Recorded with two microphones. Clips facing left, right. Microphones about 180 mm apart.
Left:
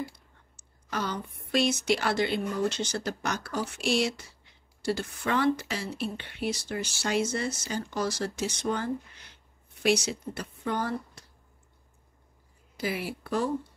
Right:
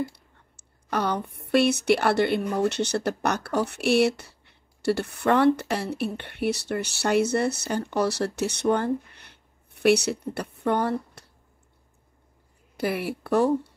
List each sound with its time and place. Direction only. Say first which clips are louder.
0.0 s speech: right 6 dB; 60° right (ahead or behind)
12.7 s speech: right 5 dB; 60° right (ahead or behind)